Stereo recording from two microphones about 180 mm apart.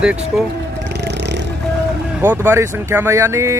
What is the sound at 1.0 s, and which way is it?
Music, 70° right (ahead or behind).